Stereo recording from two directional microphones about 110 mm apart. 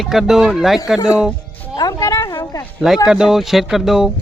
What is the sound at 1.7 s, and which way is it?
Music, 35° left (ahead or behind).